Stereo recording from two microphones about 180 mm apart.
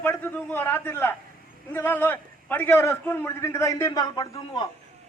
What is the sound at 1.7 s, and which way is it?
A man's voice, 10° left (ahead or behind).